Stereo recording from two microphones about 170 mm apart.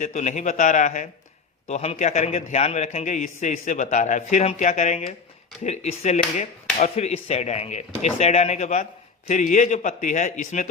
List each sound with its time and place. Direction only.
0.0 s a man's voice: 45° left (ahead or behind)